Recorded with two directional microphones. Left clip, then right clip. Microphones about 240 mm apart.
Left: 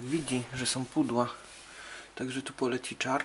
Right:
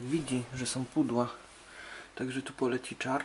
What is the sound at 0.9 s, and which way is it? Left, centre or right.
Speech, centre.